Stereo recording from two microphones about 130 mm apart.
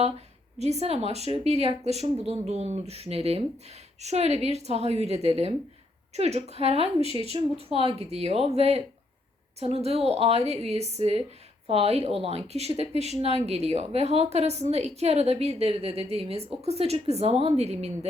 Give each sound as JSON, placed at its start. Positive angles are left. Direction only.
{"t": 0.6, "sound": "a woman's voice", "side_deg": -55}